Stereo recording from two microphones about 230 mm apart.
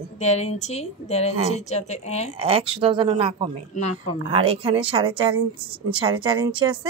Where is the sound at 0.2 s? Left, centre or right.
Left.